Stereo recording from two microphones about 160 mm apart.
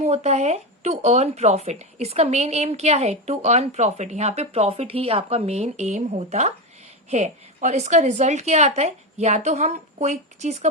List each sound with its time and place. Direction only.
0.0 s speech: 40° right (ahead or behind)